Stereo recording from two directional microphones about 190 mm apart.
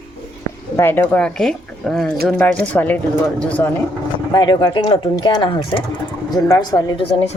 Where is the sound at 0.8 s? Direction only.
10° left (ahead or behind).